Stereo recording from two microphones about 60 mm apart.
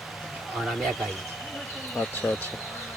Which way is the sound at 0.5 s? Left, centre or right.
Centre.